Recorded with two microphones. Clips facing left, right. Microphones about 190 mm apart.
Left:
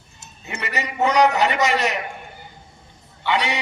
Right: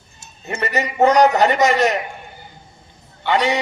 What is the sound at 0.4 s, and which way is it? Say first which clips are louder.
A man's voice: right 6 dB; 45° right (ahead or behind).